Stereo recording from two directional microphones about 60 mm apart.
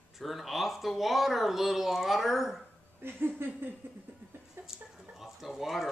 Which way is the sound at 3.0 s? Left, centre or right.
Right.